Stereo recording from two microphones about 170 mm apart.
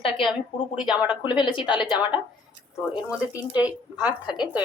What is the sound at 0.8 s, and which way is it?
Speech, 5° right (ahead or behind).